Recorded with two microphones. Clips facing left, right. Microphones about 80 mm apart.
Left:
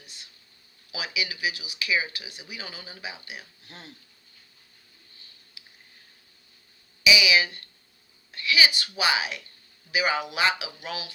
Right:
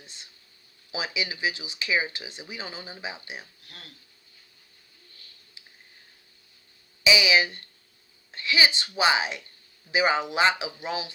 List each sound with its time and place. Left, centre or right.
0.0 s speech: right
3.7 s speech: left
5.6 s a sound: right
7.0 s speech: right